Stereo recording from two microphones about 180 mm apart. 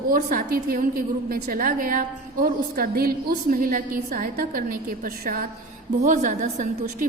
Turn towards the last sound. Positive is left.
turn(degrees=-45)  # may be behind; listen again after turning